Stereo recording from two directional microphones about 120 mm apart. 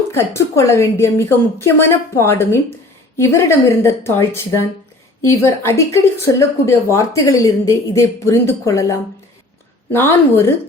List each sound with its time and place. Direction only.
0.1 s a woman's voice: 20° left (ahead or behind)